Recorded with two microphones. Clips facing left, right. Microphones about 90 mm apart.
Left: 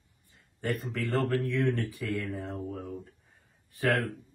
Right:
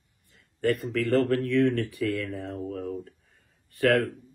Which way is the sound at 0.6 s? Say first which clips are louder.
Right 7 dB; 65° right (ahead or behind).